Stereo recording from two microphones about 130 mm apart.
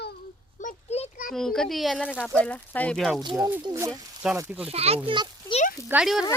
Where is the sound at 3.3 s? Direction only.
20° right (ahead or behind).